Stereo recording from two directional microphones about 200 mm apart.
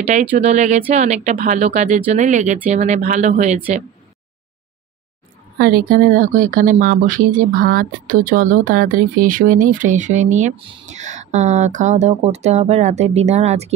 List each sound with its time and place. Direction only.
0.0 s speech: 35° right (ahead or behind)
5.6 s speech: 45° right (ahead or behind)